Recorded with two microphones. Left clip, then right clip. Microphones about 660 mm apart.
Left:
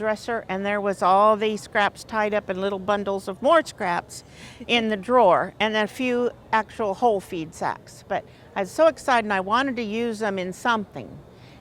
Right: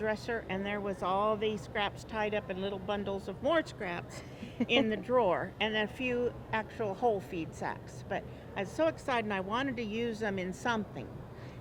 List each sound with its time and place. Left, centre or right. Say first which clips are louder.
0.0 s speech: left 9 dB; left